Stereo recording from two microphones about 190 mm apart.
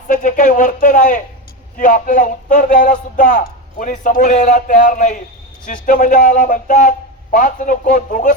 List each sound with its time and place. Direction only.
0.1 s a man's voice: 40° left (ahead or behind)